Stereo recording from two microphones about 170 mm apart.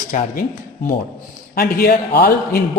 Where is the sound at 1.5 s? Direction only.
60° left (ahead or behind).